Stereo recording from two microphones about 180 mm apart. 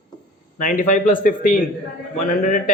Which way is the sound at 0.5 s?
45° left (ahead or behind).